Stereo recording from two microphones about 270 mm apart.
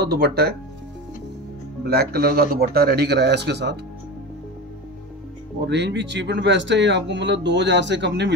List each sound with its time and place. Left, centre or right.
0.0 s speech: right
1.9 s speech: right
5.7 s speech: right